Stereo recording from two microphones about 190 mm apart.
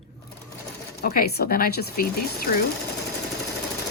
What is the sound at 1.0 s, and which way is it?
Speech, 55° left (ahead or behind).